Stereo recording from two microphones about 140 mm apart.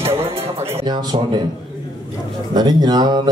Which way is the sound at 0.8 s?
30° right (ahead or behind).